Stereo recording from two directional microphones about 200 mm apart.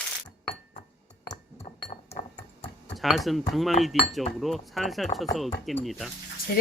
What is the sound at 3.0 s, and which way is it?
Speech, centre (ahead or behind).